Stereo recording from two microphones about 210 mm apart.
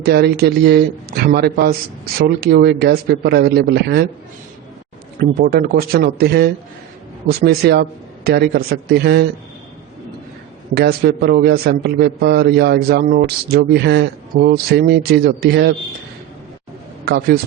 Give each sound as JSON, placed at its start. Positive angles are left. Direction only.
{"t": 0.0, "sound": "a man's voice", "side_deg": -50}
{"t": 5.4, "sound": "a man's voice", "side_deg": -50}
{"t": 10.8, "sound": "a man's voice", "side_deg": -45}
{"t": 17.1, "sound": "a man's voice", "side_deg": -50}